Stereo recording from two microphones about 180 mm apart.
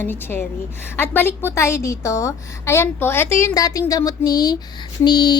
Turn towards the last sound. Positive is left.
turn(degrees=25)  # may be behind; listen again after turning